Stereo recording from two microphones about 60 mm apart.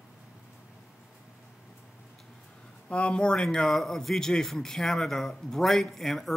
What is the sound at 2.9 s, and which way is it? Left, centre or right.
Speech, centre.